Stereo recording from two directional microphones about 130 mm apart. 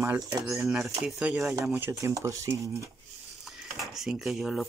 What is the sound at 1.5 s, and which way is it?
Speech, 20° right (ahead or behind).